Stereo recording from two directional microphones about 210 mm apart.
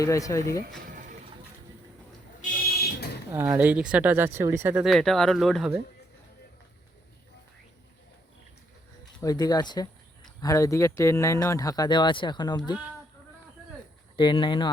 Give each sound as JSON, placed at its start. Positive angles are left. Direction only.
{"t": 0.0, "sound": "speech", "side_deg": 15}
{"t": 2.6, "sound": "fire alarm", "side_deg": 50}
{"t": 3.3, "sound": "speech", "side_deg": -10}
{"t": 9.2, "sound": "speech", "side_deg": 15}
{"t": 14.2, "sound": "speech", "side_deg": 20}